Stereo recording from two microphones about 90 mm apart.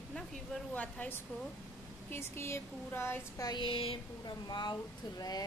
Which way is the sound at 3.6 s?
80° left.